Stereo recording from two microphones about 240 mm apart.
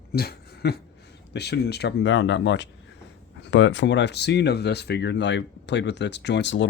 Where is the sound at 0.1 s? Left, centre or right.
Left.